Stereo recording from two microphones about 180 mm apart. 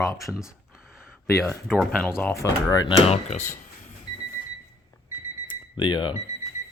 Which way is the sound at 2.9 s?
35° left (ahead or behind).